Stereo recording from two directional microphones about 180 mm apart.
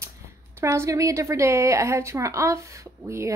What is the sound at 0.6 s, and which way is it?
A woman's voice, 15° right (ahead or behind).